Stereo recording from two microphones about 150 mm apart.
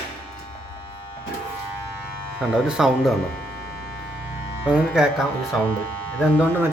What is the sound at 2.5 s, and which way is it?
Speech, 5° right (ahead or behind).